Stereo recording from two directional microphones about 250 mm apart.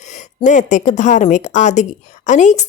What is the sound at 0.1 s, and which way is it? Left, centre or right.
A woman's voice, left.